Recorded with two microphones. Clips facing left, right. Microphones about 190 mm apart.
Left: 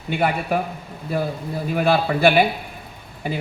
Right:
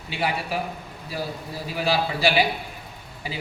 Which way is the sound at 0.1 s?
55° left (ahead or behind).